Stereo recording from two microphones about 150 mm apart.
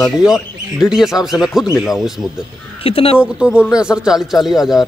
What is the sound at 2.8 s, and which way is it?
Speech, 40° left (ahead or behind).